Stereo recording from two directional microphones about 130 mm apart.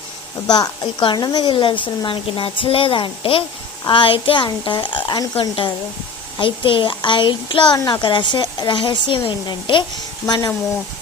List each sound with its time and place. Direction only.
0.4 s a woman's voice: 30° left (ahead or behind)